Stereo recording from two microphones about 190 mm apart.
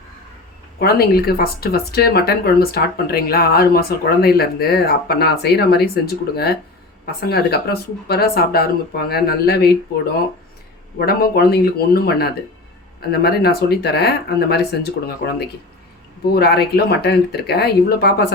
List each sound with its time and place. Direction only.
0.8 s speech: 55° left (ahead or behind)
10.9 s speech: 50° left (ahead or behind)